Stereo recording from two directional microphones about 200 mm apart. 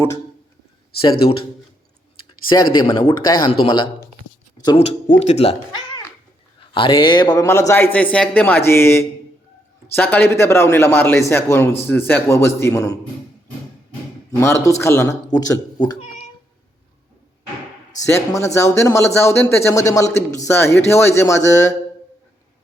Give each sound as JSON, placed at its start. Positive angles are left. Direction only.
{"t": 2.5, "sound": "speech", "side_deg": 20}
{"t": 5.2, "sound": "a man's voice", "side_deg": 35}
{"t": 14.3, "sound": "a man's voice", "side_deg": 15}
{"t": 18.3, "sound": "a man's voice", "side_deg": 15}